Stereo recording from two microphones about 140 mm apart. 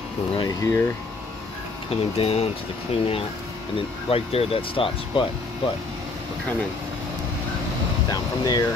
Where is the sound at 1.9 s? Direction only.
45° left (ahead or behind).